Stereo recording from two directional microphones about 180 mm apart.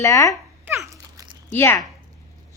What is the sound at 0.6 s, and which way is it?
Babbling, 15° right (ahead or behind).